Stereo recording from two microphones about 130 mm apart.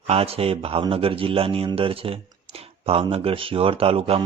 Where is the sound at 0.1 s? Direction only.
50° right (ahead or behind).